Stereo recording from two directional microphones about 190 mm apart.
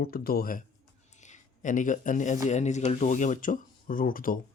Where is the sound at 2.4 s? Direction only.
40° left (ahead or behind).